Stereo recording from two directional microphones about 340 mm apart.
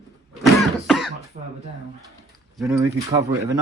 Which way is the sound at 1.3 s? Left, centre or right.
Right.